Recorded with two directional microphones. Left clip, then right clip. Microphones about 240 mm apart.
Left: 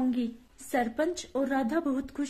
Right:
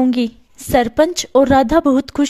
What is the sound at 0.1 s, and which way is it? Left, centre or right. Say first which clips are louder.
A woman's voice: right 13 dB; right.